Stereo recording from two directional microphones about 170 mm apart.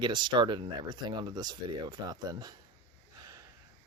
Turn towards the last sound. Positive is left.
turn(degrees=-20)  # may be behind; listen again after turning